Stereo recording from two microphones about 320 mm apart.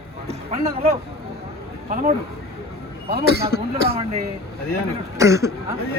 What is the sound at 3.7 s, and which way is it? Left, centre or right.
Speech, centre.